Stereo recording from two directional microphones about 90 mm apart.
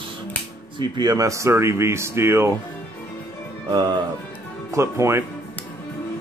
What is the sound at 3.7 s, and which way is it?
Speech, 50° right (ahead or behind).